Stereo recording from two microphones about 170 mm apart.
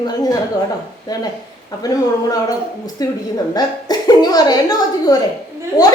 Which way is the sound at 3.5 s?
25° left (ahead or behind).